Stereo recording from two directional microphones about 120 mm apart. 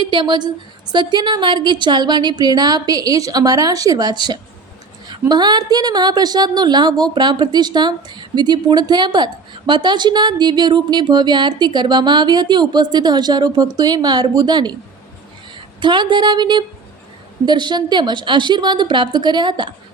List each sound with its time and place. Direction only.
0.0 s a woman's voice: 40° right (ahead or behind)
15.8 s a woman's voice: 40° right (ahead or behind)